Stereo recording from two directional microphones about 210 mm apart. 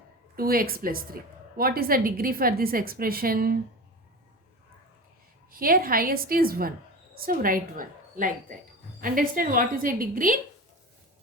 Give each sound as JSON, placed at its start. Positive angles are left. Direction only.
{"t": 0.3, "sound": "a woman's voice", "side_deg": -45}
{"t": 5.5, "sound": "a woman's voice", "side_deg": -45}